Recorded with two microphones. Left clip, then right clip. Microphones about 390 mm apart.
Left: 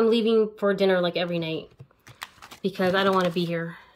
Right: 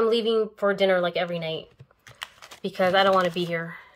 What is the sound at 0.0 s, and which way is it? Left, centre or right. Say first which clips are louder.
Speech: left 1 dB; right.